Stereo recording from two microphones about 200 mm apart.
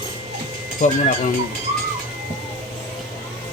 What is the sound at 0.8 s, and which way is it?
Speech, 40° left (ahead or behind).